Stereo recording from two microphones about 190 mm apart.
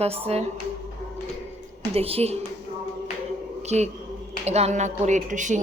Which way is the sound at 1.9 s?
30° right (ahead or behind).